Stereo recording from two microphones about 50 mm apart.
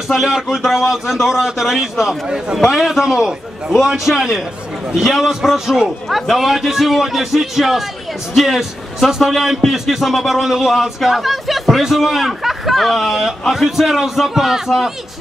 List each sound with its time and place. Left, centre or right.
0.1 s speech: centre
2.2 s a man's voice: centre